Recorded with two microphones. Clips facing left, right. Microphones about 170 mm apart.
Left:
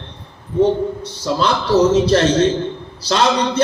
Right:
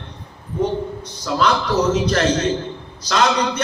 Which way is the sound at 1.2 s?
30° left (ahead or behind).